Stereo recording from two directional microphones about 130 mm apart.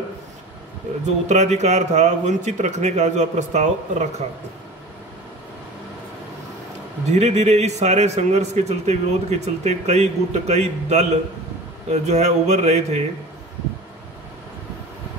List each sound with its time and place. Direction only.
1.0 s a man's voice: 60° right (ahead or behind)
7.1 s a man's voice: 60° right (ahead or behind)